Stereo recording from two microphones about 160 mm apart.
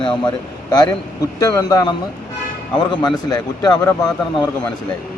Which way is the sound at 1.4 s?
25° left (ahead or behind).